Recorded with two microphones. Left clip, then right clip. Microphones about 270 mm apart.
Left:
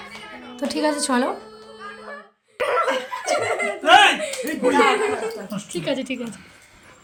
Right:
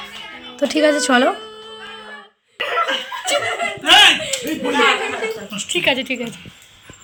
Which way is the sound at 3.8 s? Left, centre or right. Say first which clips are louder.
Right 3 dB; left.